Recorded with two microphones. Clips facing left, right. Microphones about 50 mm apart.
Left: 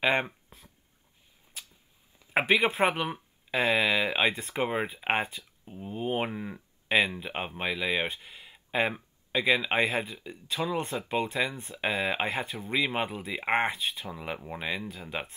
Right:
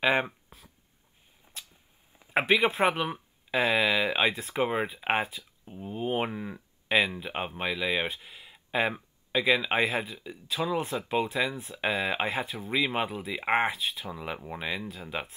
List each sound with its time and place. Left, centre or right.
0.0 s speech: centre
1.5 s vehicle: right
2.6 s speech: centre